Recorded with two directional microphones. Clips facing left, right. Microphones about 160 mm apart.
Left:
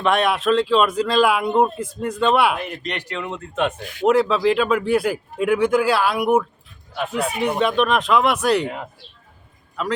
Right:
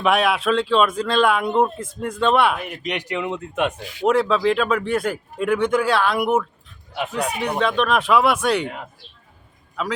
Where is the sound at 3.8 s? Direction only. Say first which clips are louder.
Left 1 dB; 50° left (ahead or behind).